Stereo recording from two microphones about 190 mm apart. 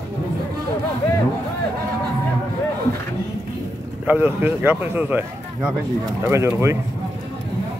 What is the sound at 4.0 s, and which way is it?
Speech, 10° right (ahead or behind).